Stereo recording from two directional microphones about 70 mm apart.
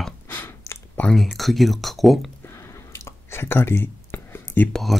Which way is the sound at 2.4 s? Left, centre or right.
Left.